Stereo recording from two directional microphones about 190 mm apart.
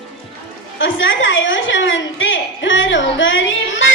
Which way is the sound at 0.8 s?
85° left.